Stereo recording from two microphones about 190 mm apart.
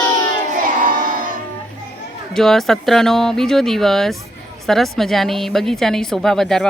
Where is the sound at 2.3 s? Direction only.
Centre (ahead or behind).